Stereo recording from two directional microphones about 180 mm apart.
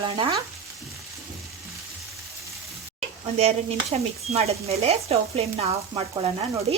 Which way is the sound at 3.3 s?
35° right (ahead or behind).